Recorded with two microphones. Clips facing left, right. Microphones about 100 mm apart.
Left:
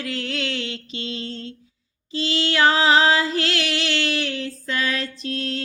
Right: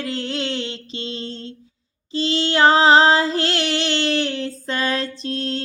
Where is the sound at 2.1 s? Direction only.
25° right (ahead or behind).